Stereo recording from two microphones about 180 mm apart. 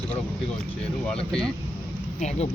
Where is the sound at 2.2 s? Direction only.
40° left (ahead or behind).